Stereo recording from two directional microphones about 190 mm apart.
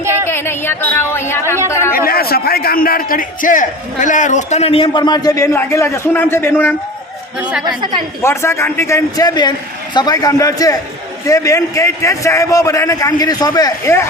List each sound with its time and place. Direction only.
0.0 s music: 15° right (ahead or behind)
0.3 s a man's voice: 10° left (ahead or behind)
1.9 s a man's voice: 50° left (ahead or behind); by 6.7 s 10° left (ahead or behind)
8.2 s a man's voice: 15° left (ahead or behind)